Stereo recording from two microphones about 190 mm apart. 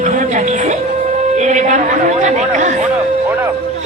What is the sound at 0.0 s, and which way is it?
Music, 40° right (ahead or behind).